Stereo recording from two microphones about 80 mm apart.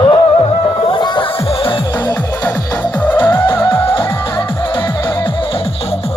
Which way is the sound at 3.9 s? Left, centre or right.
Left.